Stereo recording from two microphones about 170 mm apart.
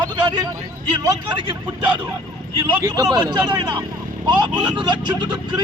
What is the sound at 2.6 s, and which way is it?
Speech, 20° right (ahead or behind).